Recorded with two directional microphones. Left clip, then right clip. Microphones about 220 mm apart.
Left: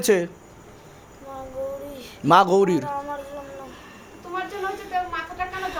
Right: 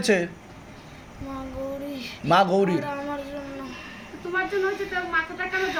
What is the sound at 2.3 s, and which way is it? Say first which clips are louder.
Speech: left 4 dB; 55° left (ahead or behind).